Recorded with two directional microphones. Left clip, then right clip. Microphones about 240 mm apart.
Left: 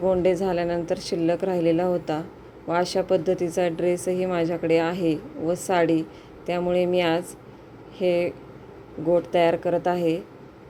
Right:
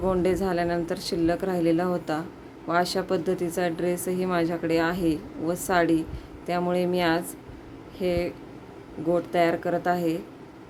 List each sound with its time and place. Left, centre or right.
0.0 s speech: centre